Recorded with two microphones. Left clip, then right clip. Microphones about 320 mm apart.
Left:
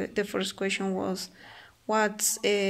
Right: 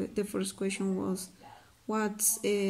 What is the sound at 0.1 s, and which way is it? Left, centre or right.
Speech, centre.